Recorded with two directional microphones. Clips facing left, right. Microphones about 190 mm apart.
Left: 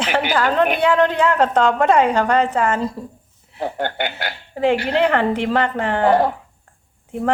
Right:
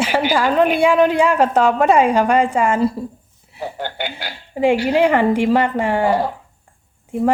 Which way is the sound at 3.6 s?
55° left (ahead or behind).